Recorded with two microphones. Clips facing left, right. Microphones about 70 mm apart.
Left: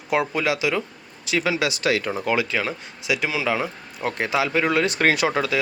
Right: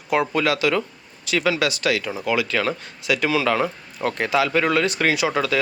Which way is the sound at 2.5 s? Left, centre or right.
Centre.